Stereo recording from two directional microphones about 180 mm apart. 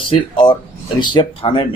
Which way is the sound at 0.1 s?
25° left (ahead or behind).